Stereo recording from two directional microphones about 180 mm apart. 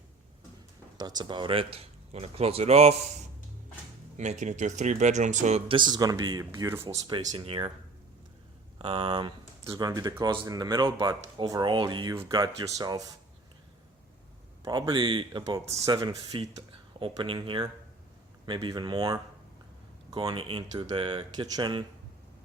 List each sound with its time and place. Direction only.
0.9 s speech: 20° right (ahead or behind)
4.2 s speech: 40° right (ahead or behind); by 6.9 s 15° right (ahead or behind)
7.3 s speech: 30° right (ahead or behind)
8.8 s speech: 30° right (ahead or behind)
14.6 s speech: 25° right (ahead or behind)